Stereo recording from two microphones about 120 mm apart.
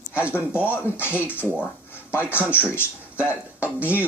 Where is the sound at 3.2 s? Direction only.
10° right (ahead or behind).